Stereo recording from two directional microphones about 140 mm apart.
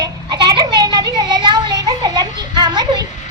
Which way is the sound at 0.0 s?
30° right (ahead or behind).